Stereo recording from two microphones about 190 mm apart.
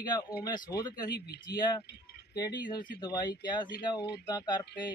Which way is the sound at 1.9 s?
60° left (ahead or behind).